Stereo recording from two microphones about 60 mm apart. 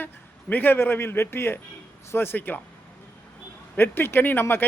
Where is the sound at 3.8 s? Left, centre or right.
Left.